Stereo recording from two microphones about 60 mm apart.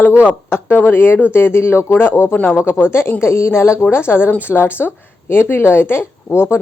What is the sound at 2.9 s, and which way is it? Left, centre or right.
A woman's voice, left.